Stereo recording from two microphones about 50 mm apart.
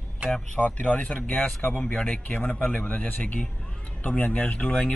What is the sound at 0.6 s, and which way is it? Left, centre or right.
Speech, left.